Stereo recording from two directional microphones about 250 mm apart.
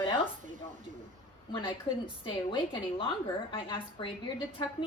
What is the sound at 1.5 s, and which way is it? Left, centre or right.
A woman's voice, centre.